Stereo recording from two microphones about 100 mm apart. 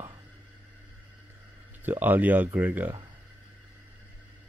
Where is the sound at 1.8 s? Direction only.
20° right (ahead or behind).